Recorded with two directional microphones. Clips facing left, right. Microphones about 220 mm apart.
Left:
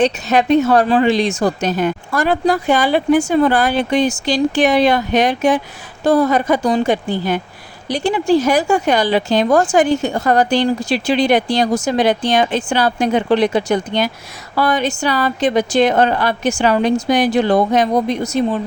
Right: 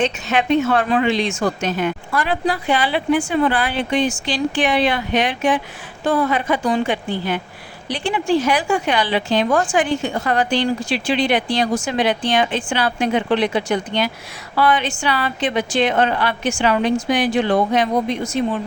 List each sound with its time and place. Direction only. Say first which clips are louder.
0.0 s a woman's voice: left 5 dB; 40° left (ahead or behind)